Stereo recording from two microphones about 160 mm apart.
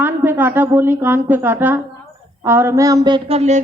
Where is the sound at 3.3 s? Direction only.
45° right (ahead or behind).